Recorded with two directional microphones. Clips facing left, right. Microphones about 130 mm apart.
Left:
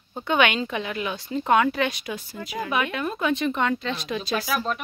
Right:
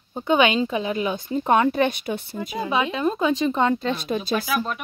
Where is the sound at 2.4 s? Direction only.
15° right (ahead or behind).